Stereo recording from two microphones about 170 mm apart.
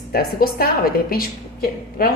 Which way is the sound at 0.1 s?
65° left (ahead or behind).